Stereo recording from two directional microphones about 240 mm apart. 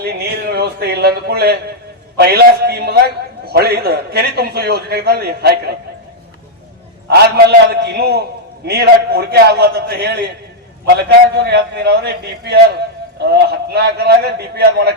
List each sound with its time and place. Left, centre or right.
0.0 s a sound: right
2.1 s a man's voice: right
7.1 s a man's voice: right
11.4 s a man's voice: right